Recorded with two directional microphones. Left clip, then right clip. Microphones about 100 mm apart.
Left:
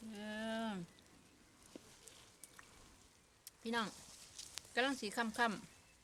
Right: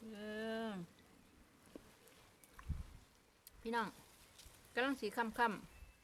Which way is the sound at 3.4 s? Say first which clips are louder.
Even; 15° right (ahead or behind).